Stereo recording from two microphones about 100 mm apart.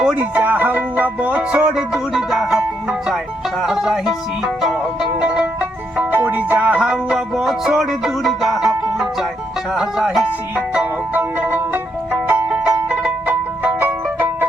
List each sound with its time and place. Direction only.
0.0 s music: 10° right (ahead or behind)
3.6 s speech: 5° right (ahead or behind)
5.2 s music: 15° right (ahead or behind)
9.7 s speech: 5° right (ahead or behind)
10.8 s music: 20° right (ahead or behind)